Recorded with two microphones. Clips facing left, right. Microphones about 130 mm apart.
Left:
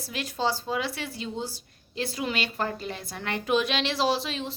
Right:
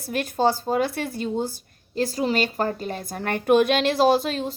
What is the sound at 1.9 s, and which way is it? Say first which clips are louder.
A woman's voice: right 7 dB; 40° right (ahead or behind).